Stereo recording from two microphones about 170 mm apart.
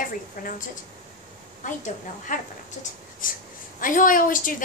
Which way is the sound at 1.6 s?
50° left (ahead or behind).